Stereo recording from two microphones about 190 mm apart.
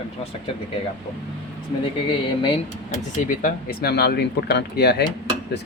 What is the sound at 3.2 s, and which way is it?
Speech, 50° left (ahead or behind).